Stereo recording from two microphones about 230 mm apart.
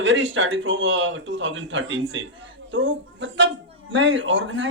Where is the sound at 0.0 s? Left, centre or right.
Right.